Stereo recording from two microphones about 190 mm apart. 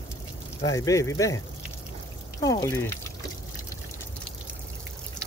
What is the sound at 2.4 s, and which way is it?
Speech, 20° left (ahead or behind).